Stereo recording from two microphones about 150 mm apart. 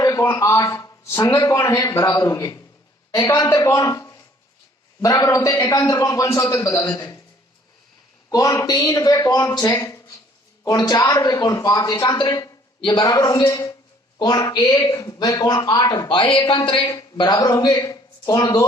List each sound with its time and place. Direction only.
0.0 s speech: 20° left (ahead or behind)
8.3 s speech: 25° left (ahead or behind)